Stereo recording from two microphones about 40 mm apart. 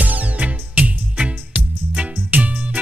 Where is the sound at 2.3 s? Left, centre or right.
Right.